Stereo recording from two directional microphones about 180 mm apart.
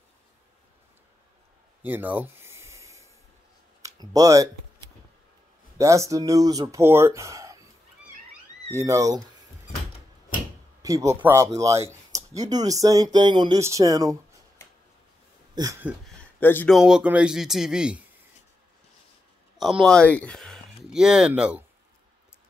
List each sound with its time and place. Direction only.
1.8 s a sound: 10° right (ahead or behind)
3.8 s speech: 20° right (ahead or behind)
5.8 s speech: 15° right (ahead or behind)
8.7 s speech: 15° right (ahead or behind)
10.8 s speech: 20° right (ahead or behind)
15.5 s speech: 20° right (ahead or behind)
16.2 s a sound: 10° left (ahead or behind)
16.7 s speech: 5° right (ahead or behind)
19.6 s speech: centre (ahead or behind)